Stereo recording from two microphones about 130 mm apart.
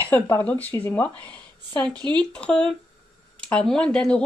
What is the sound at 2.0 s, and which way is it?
Speech, 35° right (ahead or behind).